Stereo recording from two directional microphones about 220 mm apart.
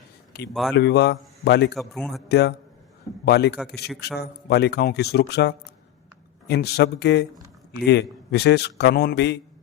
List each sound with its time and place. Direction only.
0.7 s speech: 50° left (ahead or behind)
1.7 s a man's voice: centre (ahead or behind)
2.3 s speech: 50° left (ahead or behind)